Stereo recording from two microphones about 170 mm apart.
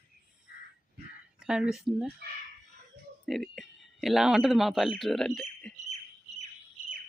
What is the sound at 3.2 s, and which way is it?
Speech, centre (ahead or behind).